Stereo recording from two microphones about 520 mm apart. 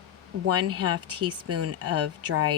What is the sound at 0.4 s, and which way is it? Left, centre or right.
Speech, right.